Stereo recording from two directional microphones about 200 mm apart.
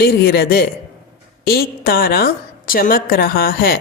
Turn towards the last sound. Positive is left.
turn(degrees=50)  # may be behind; listen again after turning